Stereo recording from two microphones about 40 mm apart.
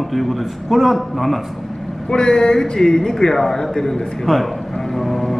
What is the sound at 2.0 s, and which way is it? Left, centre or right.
A man's voice, left.